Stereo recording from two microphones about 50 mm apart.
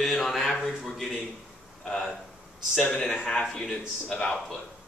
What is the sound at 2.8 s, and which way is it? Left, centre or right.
A man's voice, left.